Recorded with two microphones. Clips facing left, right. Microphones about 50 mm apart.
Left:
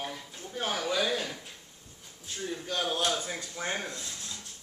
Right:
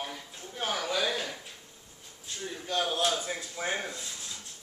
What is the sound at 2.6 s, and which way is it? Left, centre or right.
Speech, centre.